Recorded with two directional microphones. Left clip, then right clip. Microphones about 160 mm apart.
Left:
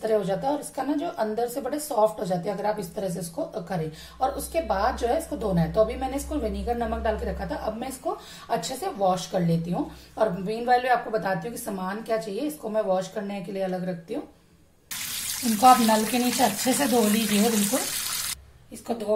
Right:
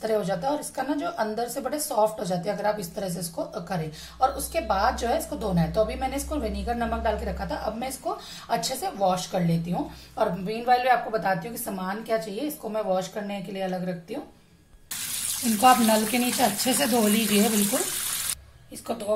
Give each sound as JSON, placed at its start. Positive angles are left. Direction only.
{"t": 0.0, "sound": "a woman's voice", "side_deg": 0}
{"t": 15.6, "sound": "a woman's voice", "side_deg": 0}